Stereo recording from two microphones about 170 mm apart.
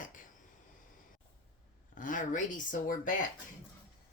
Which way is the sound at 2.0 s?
50° left (ahead or behind).